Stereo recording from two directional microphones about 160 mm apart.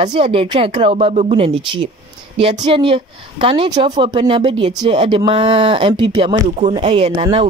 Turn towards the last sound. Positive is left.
turn(degrees=-35)  # may be behind; listen again after turning